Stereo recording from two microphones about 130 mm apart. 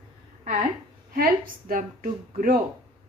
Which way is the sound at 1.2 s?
90° right.